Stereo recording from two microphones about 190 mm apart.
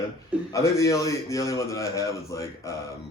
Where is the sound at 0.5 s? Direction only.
15° left (ahead or behind).